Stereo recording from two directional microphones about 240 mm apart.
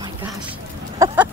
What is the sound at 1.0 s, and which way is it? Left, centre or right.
Chicken, centre.